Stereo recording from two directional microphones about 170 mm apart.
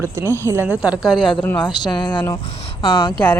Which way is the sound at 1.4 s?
10° left (ahead or behind).